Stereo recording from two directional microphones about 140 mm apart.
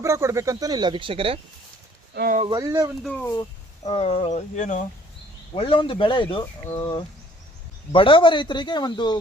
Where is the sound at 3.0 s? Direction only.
10° left (ahead or behind).